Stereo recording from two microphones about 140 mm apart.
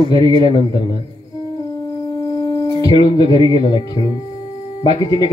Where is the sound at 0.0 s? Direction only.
35° left (ahead or behind).